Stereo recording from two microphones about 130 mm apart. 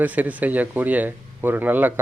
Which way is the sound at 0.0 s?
10° right (ahead or behind).